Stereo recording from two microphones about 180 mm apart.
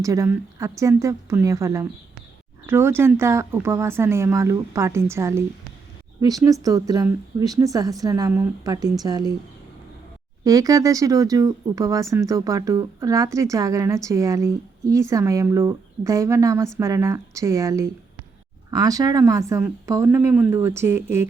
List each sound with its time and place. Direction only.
0.0 s a woman's voice: 15° right (ahead or behind)
10.4 s a woman's voice: 20° right (ahead or behind)